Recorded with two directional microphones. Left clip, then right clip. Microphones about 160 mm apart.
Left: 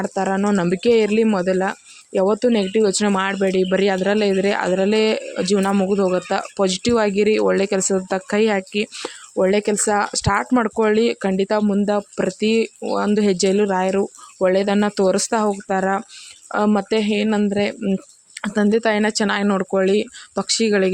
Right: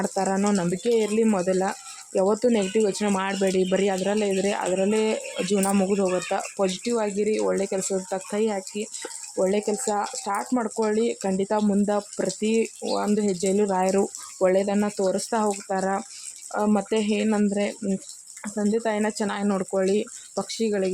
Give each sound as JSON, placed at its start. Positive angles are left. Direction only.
{"t": 0.0, "sound": "speech", "side_deg": 20}
{"t": 14.5, "sound": "speech", "side_deg": 30}
{"t": 15.4, "sound": "speech", "side_deg": 25}
{"t": 18.4, "sound": "speech", "side_deg": 35}